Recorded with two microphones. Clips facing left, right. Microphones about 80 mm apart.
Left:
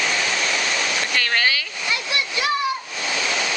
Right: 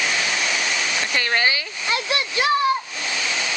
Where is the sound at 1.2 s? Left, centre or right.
Centre.